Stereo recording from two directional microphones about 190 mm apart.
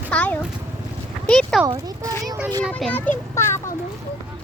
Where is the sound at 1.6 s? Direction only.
15° right (ahead or behind).